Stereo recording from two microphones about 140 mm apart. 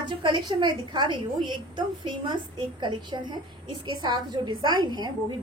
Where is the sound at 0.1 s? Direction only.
35° right (ahead or behind).